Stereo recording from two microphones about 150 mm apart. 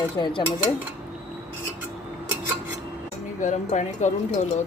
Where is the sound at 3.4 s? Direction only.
55° left (ahead or behind).